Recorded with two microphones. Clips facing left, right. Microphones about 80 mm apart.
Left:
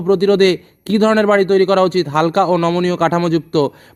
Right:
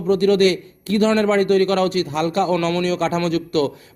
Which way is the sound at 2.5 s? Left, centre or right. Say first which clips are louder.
Left 5 dB; left.